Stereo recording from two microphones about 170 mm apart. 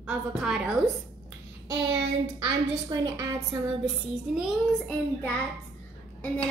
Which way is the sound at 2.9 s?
20° right (ahead or behind).